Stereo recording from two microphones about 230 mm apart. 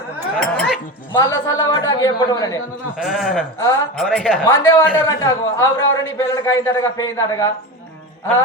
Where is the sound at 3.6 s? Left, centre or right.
Centre.